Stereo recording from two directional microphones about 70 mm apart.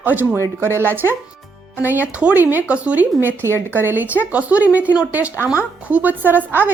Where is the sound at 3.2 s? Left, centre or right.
Right.